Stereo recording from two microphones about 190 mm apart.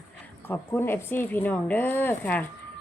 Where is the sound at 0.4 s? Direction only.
10° left (ahead or behind).